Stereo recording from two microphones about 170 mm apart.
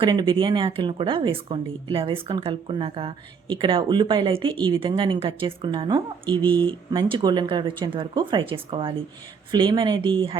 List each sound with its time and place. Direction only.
0.0 s a woman's voice: 25° right (ahead or behind)